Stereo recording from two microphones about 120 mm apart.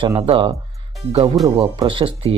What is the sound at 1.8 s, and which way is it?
Speech, 45° right (ahead or behind).